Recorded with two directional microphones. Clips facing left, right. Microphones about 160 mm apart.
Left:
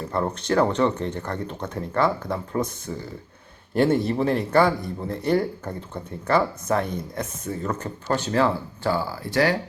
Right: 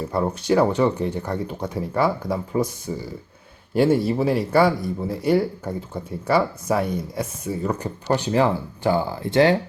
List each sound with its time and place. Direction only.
0.1 s speech: 10° right (ahead or behind)